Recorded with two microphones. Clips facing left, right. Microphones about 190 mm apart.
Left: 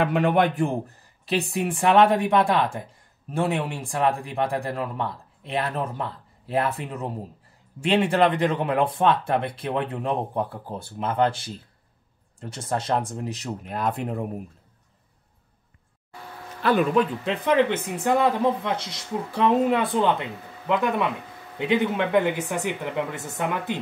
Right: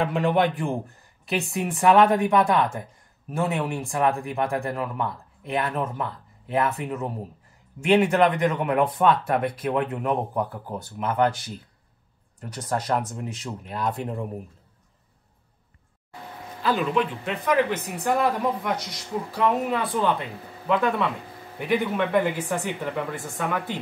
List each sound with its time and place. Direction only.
0.0 s a man's voice: 65° left (ahead or behind)
0.6 s speech: 35° left (ahead or behind); by 14.1 s 55° left (ahead or behind)
16.9 s speech: 35° left (ahead or behind)